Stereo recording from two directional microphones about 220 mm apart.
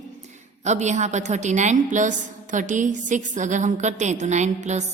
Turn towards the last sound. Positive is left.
turn(degrees=-30)  # may be behind; listen again after turning